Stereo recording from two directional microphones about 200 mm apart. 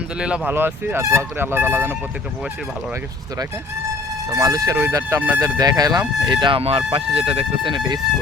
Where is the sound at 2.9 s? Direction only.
15° right (ahead or behind).